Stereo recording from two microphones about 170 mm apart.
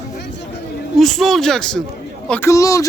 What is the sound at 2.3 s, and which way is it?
Speech, 15° left (ahead or behind).